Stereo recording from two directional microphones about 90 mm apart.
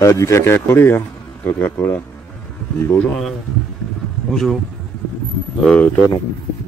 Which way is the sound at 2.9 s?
5° left (ahead or behind).